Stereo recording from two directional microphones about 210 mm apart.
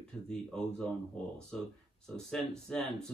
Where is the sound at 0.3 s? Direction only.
5° left (ahead or behind).